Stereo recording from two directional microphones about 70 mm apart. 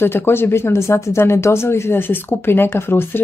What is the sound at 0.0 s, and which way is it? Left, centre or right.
Speech, left.